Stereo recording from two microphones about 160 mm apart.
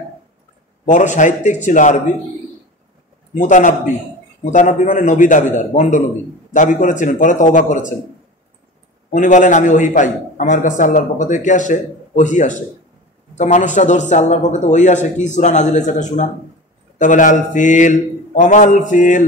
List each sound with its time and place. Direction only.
0.8 s a man's voice: 50° left (ahead or behind)
3.3 s a man's voice: 50° left (ahead or behind)
9.1 s a man's voice: 55° left (ahead or behind)